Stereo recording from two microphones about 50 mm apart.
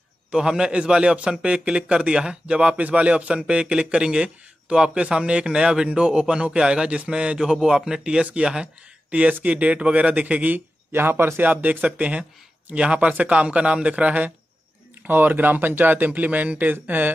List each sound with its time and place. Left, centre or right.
0.3 s speech: centre
10.9 s speech: right
11.4 s speech: right
15.0 s speech: right